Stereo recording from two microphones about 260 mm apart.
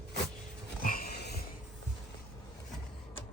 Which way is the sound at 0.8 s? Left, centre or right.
Left.